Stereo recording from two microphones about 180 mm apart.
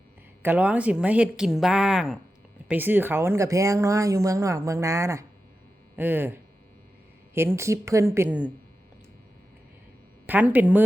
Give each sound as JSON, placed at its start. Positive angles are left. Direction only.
{"t": 0.4, "sound": "a woman's voice", "side_deg": -10}
{"t": 10.2, "sound": "speech", "side_deg": -10}